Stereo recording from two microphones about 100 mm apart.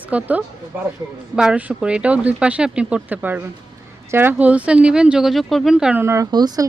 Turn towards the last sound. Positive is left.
turn(degrees=-40)  # may be behind; listen again after turning